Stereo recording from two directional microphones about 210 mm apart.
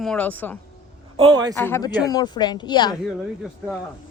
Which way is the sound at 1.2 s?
20° right (ahead or behind).